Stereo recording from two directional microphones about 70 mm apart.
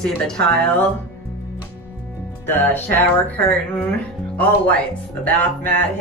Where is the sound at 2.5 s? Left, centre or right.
Left.